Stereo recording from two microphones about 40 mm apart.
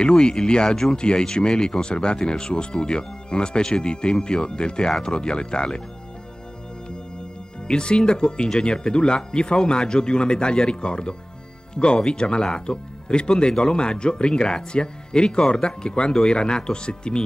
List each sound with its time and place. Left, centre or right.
0.0 s speech: left
7.6 s speech: left